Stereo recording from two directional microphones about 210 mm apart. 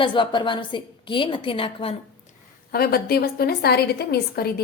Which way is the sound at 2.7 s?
45° left (ahead or behind).